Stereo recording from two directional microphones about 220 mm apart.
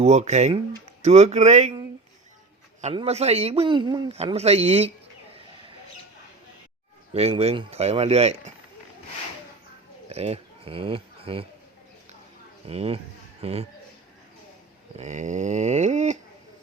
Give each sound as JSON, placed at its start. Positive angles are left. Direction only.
{"t": 0.0, "sound": "a sound", "side_deg": -30}
{"t": 2.8, "sound": "speech", "side_deg": -25}
{"t": 7.1, "sound": "speech", "side_deg": -30}
{"t": 10.1, "sound": "speech", "side_deg": -30}
{"t": 12.6, "sound": "speech", "side_deg": -25}
{"t": 14.9, "sound": "a sound", "side_deg": -35}